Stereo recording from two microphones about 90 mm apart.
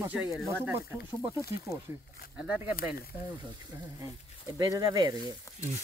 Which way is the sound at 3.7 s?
40° right (ahead or behind).